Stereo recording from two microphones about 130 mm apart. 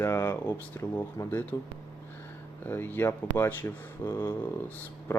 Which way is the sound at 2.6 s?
15° left (ahead or behind).